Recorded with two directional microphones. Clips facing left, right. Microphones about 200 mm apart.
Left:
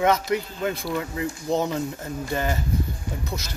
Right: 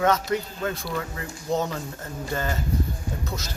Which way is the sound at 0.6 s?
15° left (ahead or behind).